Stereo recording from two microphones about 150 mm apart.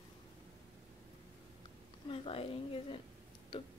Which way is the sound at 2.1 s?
40° left (ahead or behind).